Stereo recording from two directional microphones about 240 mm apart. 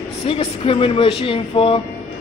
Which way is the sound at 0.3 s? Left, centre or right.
Left.